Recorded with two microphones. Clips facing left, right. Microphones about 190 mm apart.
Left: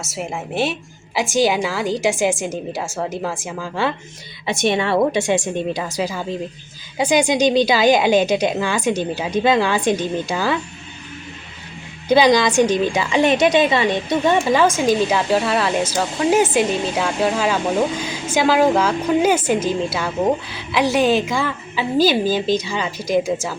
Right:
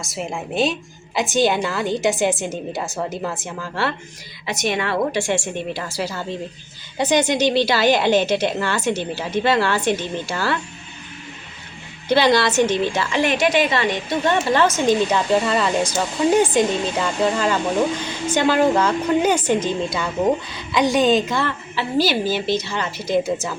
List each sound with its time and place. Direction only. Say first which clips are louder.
0.0 s a woman's voice: left 1 dB; 5° left (ahead or behind)
4.4 s a woman's voice: left 4 dB; 25° left (ahead or behind)
12.0 s a woman's voice: left 3 dB; 15° left (ahead or behind)